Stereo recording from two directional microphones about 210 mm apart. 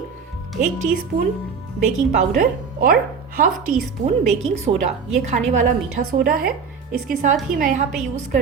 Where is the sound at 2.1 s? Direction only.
35° right (ahead or behind).